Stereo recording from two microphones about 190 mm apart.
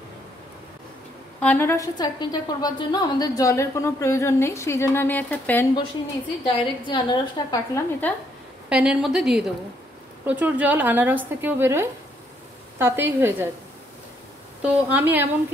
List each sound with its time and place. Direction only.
1.4 s a woman's voice: 10° left (ahead or behind)
6.4 s a woman's voice: 20° left (ahead or behind)
8.6 s a woman's voice: 5° right (ahead or behind)
14.6 s a woman's voice: 10° right (ahead or behind)